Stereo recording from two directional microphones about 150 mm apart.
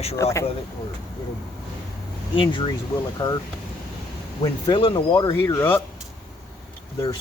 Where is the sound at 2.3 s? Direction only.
35° left (ahead or behind).